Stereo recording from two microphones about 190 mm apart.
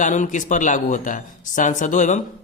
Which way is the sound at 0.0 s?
40° left (ahead or behind).